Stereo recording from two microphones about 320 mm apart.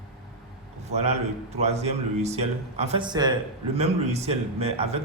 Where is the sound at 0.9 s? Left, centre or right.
Centre.